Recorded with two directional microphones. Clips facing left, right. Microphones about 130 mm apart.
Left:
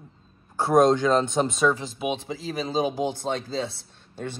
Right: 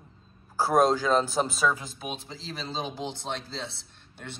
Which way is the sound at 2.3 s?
55° left (ahead or behind).